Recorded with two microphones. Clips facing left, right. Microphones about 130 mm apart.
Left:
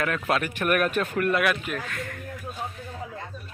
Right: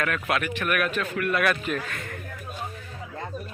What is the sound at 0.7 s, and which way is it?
Speech, 45° left (ahead or behind).